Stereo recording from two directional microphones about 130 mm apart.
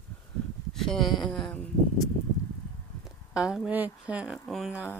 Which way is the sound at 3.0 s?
5° right (ahead or behind).